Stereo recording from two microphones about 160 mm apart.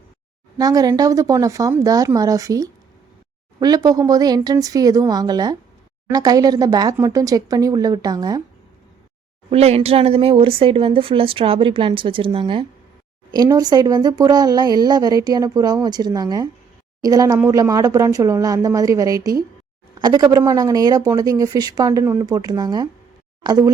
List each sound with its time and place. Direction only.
0.6 s speech: 25° right (ahead or behind)
9.5 s speech: 40° right (ahead or behind)
13.3 s speech: 25° right (ahead or behind)